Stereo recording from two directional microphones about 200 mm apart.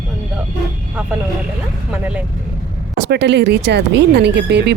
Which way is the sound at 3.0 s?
60° right (ahead or behind).